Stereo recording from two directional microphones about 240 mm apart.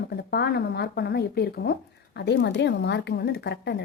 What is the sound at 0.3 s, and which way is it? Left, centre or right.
A woman's voice, left.